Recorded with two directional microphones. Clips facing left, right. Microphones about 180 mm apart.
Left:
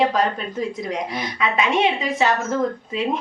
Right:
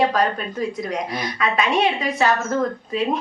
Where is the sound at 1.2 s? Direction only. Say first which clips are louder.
Even; 25° left (ahead or behind).